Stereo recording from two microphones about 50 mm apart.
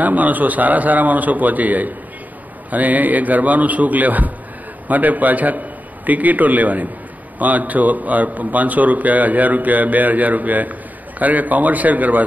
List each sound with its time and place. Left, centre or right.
0.0 s speech: right